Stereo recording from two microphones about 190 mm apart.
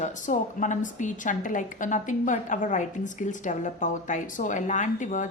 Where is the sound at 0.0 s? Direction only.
40° left (ahead or behind).